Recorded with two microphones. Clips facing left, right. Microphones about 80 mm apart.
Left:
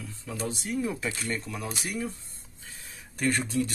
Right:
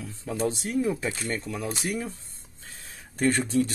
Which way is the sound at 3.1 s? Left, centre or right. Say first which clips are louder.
Right 3 dB; right.